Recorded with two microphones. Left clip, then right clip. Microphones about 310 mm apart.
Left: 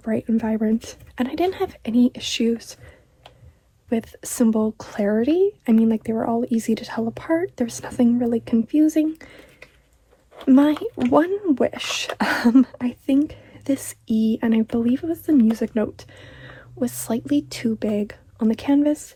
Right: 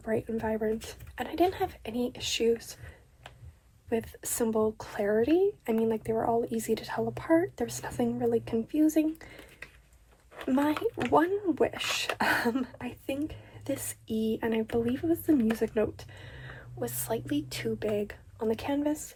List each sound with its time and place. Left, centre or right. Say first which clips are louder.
0.1 s speech: left 6 dB; centre
3.8 s speech: left 6 dB; centre
10.5 s speech: left 10 dB; centre